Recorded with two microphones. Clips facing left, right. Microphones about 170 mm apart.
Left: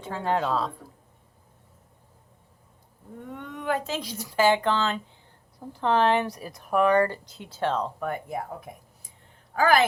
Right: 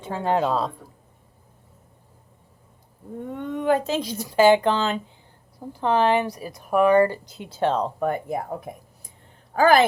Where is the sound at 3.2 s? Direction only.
25° right (ahead or behind).